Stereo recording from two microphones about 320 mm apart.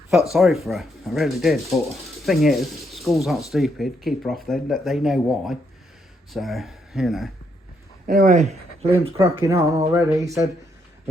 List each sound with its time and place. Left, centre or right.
0.3 s speech: centre
8.0 s speech: right
8.8 s speech: centre